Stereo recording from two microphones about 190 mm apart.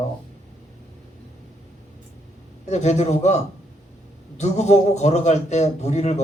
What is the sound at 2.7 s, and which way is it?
Speech, 35° left (ahead or behind).